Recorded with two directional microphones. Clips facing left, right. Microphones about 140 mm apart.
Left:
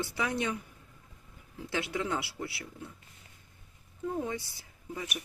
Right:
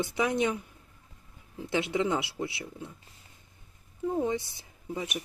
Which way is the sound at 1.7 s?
20° right (ahead or behind).